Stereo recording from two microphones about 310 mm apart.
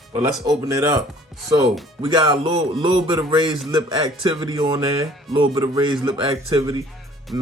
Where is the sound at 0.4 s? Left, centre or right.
Centre.